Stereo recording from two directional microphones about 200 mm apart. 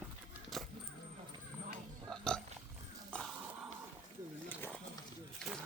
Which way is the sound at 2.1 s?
5° left (ahead or behind).